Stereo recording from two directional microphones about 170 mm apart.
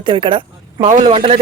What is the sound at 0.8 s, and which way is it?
Speech, 45° right (ahead or behind).